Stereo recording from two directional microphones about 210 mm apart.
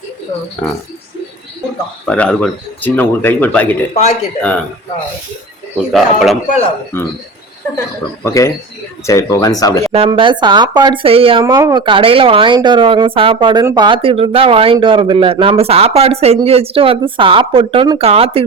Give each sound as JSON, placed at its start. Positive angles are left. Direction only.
{"t": 0.6, "sound": "speech", "side_deg": 5}
{"t": 2.0, "sound": "speech", "side_deg": 5}
{"t": 3.9, "sound": "speech", "side_deg": 30}
{"t": 4.4, "sound": "speech", "side_deg": 5}
{"t": 5.9, "sound": "speech", "side_deg": 0}
{"t": 8.2, "sound": "speech", "side_deg": 15}
{"t": 9.9, "sound": "speech", "side_deg": -25}